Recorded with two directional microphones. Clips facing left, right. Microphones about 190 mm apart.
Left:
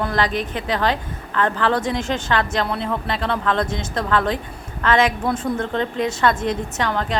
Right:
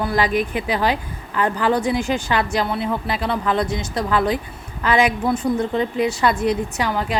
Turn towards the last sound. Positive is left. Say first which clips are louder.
# even
turn(degrees=-10)  # may be behind; listen again after turning